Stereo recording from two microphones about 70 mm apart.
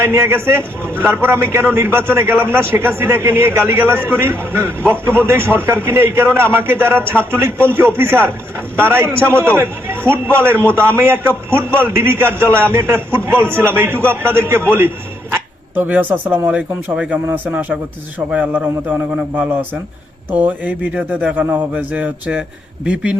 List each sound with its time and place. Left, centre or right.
0.0 s a man's voice: right
15.7 s speech: right
16.5 s speech: centre
20.3 s speech: right